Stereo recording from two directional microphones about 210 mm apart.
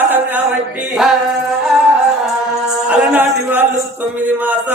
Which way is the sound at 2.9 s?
5° right (ahead or behind).